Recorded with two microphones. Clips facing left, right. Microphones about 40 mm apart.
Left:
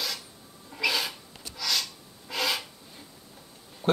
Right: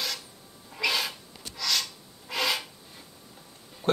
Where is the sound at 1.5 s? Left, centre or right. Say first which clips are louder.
Right 1 dB; centre.